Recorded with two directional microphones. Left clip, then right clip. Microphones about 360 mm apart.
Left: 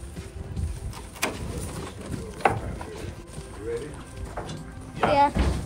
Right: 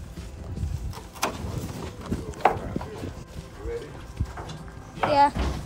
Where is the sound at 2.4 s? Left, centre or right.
Right.